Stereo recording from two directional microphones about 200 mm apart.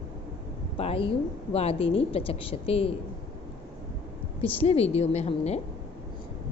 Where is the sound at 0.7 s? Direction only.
30° left (ahead or behind).